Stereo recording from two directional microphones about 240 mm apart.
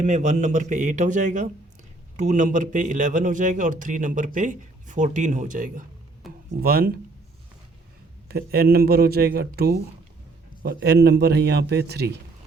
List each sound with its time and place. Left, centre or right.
0.0 s a man's voice: right
6.2 s a sound: centre
6.6 s a man's voice: right
8.3 s a man's voice: right